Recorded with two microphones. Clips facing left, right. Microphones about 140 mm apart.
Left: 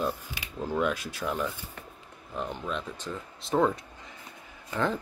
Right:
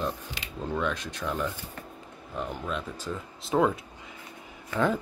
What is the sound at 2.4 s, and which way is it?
Speech, centre (ahead or behind).